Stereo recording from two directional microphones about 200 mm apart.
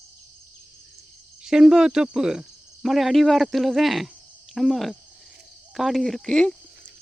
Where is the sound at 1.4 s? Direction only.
5° right (ahead or behind).